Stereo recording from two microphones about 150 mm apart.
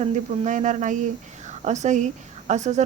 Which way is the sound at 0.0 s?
55° right (ahead or behind).